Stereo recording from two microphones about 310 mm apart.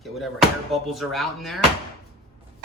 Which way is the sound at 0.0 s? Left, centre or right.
Centre.